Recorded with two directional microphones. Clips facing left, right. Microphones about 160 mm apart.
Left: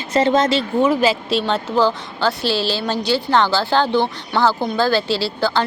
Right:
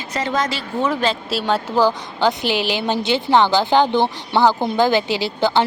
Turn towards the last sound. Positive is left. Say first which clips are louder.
# right 2 dB
turn(degrees=-20)  # may be behind; listen again after turning